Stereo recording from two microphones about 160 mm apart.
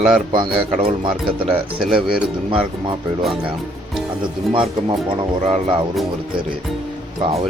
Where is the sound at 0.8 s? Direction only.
35° right (ahead or behind).